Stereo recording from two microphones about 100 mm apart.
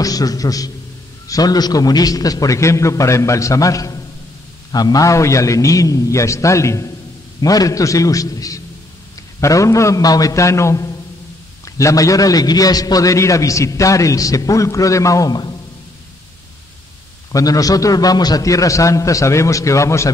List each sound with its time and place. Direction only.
0.0 s a man's voice: 40° left (ahead or behind)
17.3 s a man's voice: 35° left (ahead or behind)